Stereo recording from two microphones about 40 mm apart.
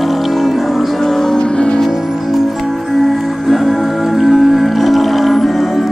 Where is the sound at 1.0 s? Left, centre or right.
Centre.